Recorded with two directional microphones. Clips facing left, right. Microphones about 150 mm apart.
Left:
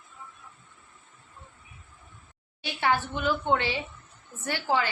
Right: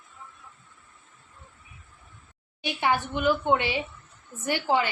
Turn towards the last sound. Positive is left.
turn(degrees=-15)  # may be behind; listen again after turning